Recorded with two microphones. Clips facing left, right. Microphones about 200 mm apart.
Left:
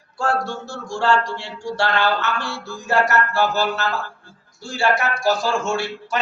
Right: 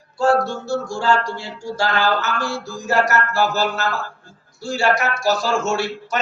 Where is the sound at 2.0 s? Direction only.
40° right (ahead or behind).